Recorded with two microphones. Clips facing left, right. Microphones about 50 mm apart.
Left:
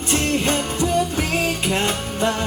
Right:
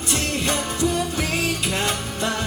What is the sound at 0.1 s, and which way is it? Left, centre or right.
Music, left.